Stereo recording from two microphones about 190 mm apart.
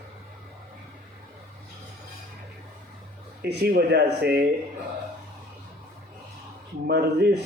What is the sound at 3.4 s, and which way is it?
Speech, 55° right (ahead or behind).